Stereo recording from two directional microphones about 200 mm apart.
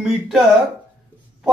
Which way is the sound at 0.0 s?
Centre (ahead or behind).